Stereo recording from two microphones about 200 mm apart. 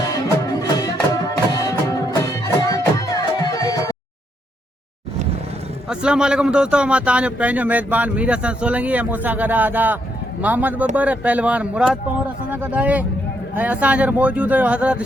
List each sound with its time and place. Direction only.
0.1 s music: 20° left (ahead or behind)
5.9 s speech: 5° right (ahead or behind)